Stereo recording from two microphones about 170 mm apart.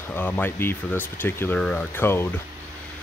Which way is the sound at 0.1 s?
10° left (ahead or behind).